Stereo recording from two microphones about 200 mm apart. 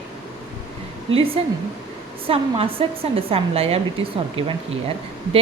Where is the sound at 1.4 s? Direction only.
30° right (ahead or behind).